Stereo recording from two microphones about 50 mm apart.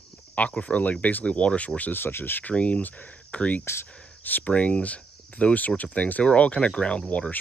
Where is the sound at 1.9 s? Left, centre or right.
Left.